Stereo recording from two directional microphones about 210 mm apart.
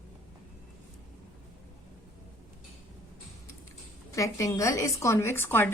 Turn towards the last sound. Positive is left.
turn(degrees=10)  # may be behind; listen again after turning